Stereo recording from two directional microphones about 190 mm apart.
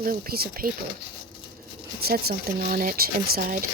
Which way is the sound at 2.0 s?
55° right (ahead or behind).